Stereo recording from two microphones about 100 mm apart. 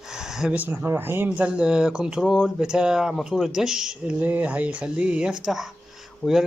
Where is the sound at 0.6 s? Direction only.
15° right (ahead or behind).